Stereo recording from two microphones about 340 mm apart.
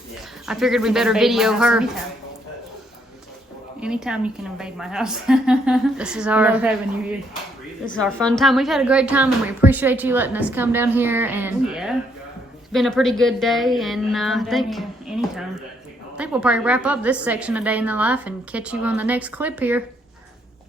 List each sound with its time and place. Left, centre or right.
0.4 s a woman's voice: centre
3.8 s a woman's voice: centre